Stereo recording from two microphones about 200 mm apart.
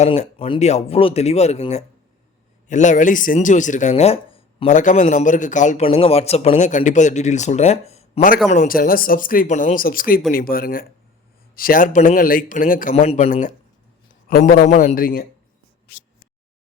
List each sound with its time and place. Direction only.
0.0 s speech: 30° left (ahead or behind)
8.4 s speech: 45° left (ahead or behind)